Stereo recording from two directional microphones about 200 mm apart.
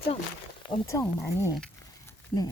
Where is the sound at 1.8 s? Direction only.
15° left (ahead or behind).